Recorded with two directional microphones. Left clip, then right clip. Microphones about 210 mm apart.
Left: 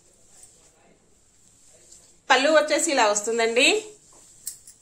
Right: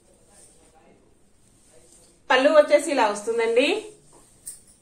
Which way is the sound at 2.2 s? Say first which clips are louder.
Right 2 dB; 50° left (ahead or behind).